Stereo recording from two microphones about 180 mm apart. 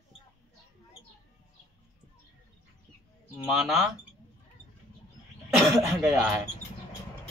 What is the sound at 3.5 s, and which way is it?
Speech, centre (ahead or behind).